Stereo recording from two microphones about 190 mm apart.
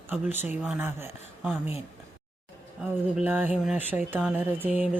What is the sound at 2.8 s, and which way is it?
Speech, 5° right (ahead or behind).